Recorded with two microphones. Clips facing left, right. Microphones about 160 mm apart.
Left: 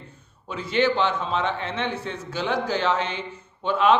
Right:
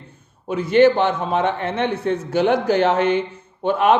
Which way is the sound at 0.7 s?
50° right (ahead or behind).